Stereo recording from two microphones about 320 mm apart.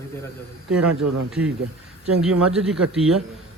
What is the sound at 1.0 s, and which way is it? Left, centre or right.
Speech, right.